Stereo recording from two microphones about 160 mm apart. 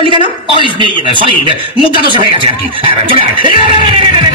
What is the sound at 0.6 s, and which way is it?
Speech, 30° right (ahead or behind).